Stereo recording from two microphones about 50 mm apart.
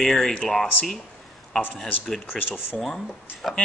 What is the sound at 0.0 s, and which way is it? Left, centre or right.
Speech, centre.